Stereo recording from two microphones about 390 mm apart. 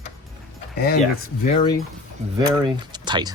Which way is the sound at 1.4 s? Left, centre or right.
Centre.